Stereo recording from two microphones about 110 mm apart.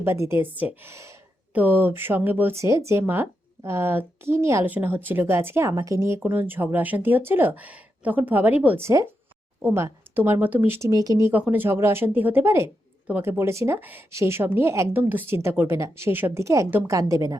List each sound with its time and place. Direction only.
0.0 s a woman's voice: 25° right (ahead or behind)
8.8 s a woman's voice: 30° right (ahead or behind)
10.8 s speech: 30° right (ahead or behind)
11.2 s a woman's voice: 20° right (ahead or behind)